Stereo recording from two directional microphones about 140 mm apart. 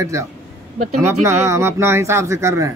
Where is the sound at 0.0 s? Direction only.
20° right (ahead or behind).